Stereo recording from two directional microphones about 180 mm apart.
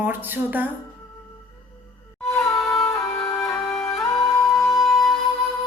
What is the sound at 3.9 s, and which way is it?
Music, 15° left (ahead or behind).